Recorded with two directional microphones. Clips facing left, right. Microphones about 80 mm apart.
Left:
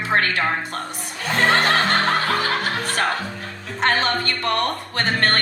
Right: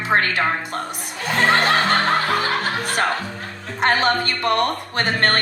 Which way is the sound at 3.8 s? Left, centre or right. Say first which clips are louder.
Right 2 dB; centre.